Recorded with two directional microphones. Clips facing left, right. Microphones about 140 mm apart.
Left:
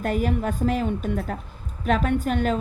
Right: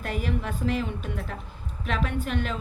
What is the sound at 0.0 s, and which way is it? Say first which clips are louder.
A woman's voice: left 6 dB; 45° left (ahead or behind).